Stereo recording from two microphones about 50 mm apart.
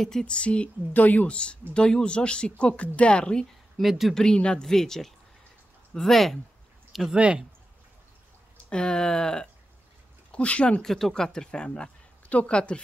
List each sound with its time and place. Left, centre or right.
0.0 s a woman's voice: centre
3.8 s speech: centre
4.1 s speech: centre
6.9 s a sound: centre
7.2 s speech: right
8.6 s a woman's voice: centre
10.8 s a woman's voice: centre